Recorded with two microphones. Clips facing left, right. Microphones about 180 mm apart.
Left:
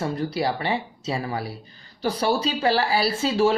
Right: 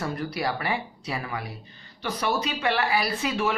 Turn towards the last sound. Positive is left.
turn(degrees=30)  # may be behind; listen again after turning